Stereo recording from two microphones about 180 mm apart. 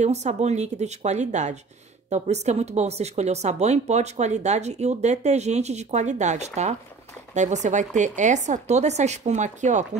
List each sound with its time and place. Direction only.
0.0 s speech: 40° right (ahead or behind)